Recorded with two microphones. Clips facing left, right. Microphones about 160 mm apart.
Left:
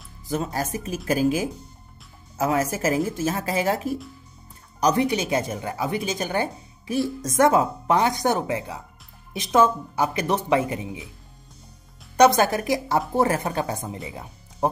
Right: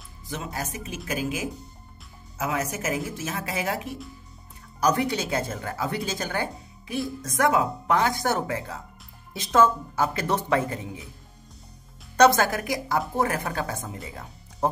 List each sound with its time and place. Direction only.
0.3 s speech: 45° left (ahead or behind)
4.7 s speech: 20° left (ahead or behind)
6.5 s music: centre (ahead or behind)
7.2 s a woman's voice: 25° left (ahead or behind)
12.2 s speech: 20° left (ahead or behind)